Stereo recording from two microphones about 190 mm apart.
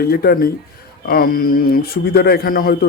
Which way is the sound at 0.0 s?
55° left (ahead or behind).